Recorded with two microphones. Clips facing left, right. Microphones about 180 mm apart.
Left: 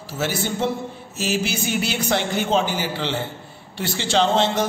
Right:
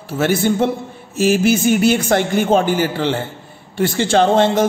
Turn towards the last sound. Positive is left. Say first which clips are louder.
# right 6 dB
turn(degrees=-50)  # may be behind; listen again after turning